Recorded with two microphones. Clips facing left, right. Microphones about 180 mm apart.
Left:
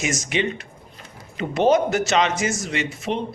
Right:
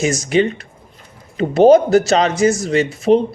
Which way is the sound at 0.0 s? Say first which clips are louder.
Right 8 dB; 35° right (ahead or behind).